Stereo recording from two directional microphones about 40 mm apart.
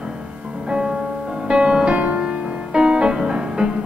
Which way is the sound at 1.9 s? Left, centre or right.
Right.